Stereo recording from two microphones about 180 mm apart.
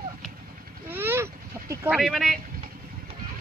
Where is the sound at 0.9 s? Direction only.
10° right (ahead or behind).